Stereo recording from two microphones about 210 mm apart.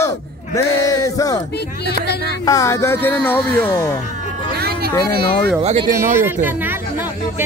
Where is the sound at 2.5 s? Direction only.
15° left (ahead or behind).